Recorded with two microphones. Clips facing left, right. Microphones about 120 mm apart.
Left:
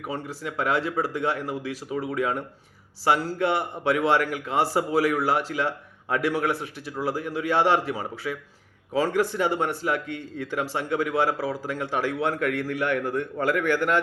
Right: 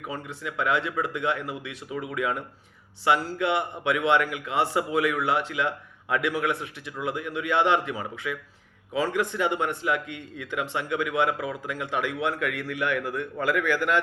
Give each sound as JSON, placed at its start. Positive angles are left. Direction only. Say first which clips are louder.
{"t": 0.1, "sound": "speech", "louder": "left 3 dB", "side_deg": 35}